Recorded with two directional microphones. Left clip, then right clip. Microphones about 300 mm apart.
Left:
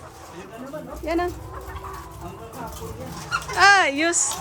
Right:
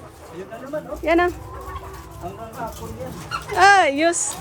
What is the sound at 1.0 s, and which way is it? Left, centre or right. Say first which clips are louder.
Chicken: right 7 dB; centre.